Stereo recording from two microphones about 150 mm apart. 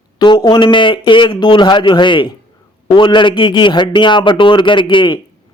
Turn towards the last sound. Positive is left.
turn(degrees=30)  # may be behind; listen again after turning